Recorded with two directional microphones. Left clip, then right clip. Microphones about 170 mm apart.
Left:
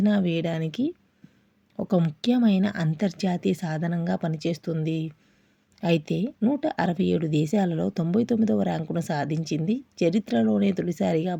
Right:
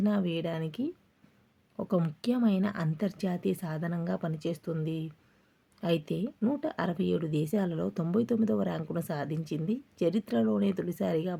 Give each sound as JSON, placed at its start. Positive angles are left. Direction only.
{"t": 0.0, "sound": "speech", "side_deg": 25}